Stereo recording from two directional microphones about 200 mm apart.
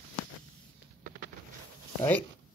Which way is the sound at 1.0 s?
40° right (ahead or behind).